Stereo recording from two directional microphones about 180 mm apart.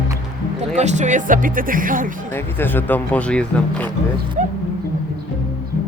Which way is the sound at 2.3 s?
10° left (ahead or behind).